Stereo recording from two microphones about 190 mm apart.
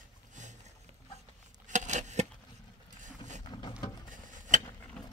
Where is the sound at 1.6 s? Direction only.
40° right (ahead or behind).